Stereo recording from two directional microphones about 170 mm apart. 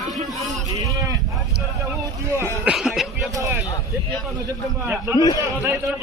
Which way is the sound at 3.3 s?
15° right (ahead or behind).